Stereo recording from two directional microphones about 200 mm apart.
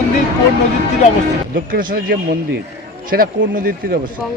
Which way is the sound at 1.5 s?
45° right (ahead or behind).